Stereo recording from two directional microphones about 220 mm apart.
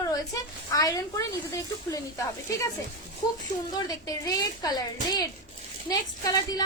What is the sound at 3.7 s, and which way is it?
A woman's voice, 15° left (ahead or behind).